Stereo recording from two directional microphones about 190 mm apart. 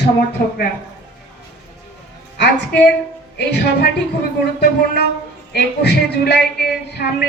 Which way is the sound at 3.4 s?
65° left (ahead or behind).